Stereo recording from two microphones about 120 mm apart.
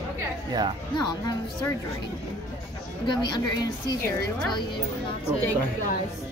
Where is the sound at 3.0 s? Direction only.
35° left (ahead or behind).